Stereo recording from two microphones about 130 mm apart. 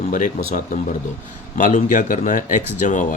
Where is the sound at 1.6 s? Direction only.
75° left (ahead or behind).